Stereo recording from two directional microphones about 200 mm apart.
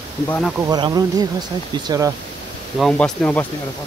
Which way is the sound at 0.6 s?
20° right (ahead or behind).